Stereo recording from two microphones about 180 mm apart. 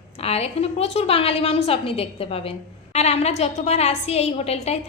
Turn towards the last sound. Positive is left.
turn(degrees=35)  # may be behind; listen again after turning